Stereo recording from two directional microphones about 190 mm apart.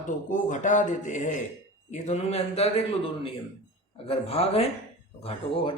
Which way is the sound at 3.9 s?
30° left (ahead or behind).